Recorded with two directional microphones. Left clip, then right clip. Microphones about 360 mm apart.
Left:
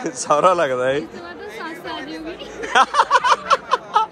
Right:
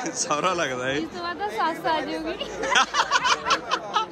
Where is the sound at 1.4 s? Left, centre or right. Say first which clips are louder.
Right 7 dB; right.